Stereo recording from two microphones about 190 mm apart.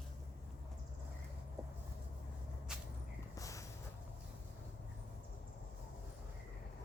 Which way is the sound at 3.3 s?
15° left (ahead or behind).